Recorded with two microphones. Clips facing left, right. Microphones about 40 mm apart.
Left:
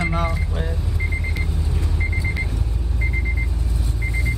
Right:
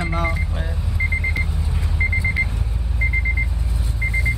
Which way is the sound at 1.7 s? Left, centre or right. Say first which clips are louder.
Right 7 dB; centre.